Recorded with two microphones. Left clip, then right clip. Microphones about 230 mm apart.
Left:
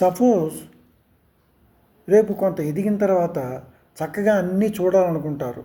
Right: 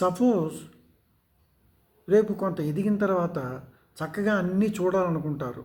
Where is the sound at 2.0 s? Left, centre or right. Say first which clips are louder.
Left 6 dB; centre.